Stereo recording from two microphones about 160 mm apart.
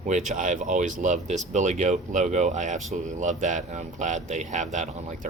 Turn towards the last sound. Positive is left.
turn(degrees=-50)  # may be behind; listen again after turning